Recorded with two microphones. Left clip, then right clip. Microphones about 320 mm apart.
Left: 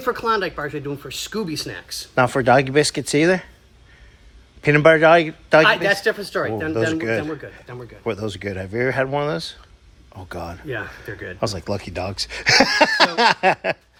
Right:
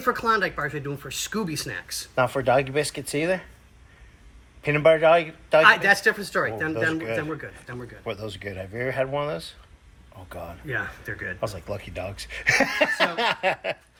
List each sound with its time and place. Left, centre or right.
0.0 s a man's voice: centre
2.1 s speech: left
4.6 s a man's voice: left
6.7 s speech: left
8.4 s speech: left
8.8 s speech: left